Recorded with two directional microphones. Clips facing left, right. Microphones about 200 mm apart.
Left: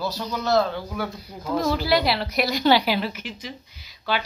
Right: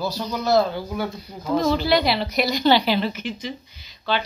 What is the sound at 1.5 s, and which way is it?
A woman's voice, 5° left (ahead or behind).